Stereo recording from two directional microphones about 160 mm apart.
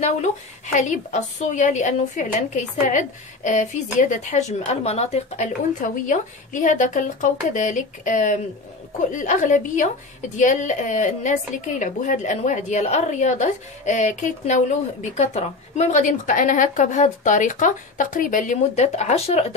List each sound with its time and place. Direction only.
0.7 s a woman's voice: 50° left (ahead or behind)